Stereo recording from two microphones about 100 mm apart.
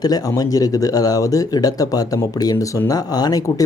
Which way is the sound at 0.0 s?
40° left (ahead or behind).